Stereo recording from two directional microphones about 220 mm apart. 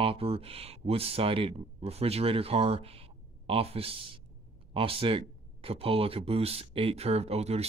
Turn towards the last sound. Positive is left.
turn(degrees=-30)  # may be behind; listen again after turning